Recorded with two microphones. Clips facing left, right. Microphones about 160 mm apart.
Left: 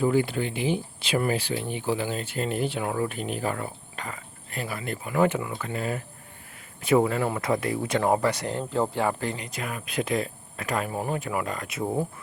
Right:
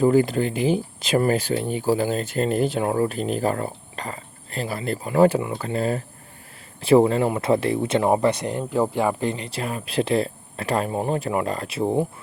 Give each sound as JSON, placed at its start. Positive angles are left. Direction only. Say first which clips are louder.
{"t": 0.0, "sound": "speech", "louder": "right 6 dB", "side_deg": -40}